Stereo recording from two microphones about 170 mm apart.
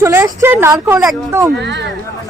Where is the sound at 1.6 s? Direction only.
90° right.